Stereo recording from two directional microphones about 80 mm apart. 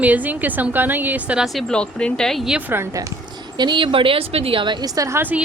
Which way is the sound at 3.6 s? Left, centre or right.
Right.